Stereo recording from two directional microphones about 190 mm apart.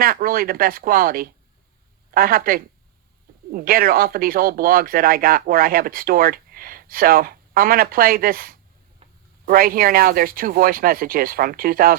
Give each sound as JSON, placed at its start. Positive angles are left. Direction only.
{"t": 0.0, "sound": "speech", "side_deg": -50}